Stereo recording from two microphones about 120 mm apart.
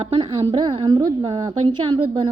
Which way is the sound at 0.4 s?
40° right (ahead or behind).